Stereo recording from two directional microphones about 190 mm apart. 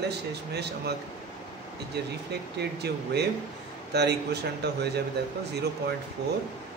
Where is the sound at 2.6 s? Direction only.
60° right (ahead or behind).